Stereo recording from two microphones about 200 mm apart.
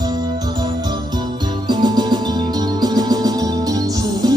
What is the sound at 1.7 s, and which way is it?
Music, 20° right (ahead or behind).